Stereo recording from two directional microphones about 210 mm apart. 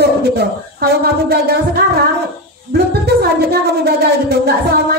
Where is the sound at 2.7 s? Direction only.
50° right (ahead or behind).